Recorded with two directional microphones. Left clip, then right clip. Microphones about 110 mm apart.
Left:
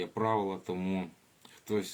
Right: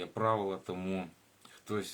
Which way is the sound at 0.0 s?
5° right (ahead or behind).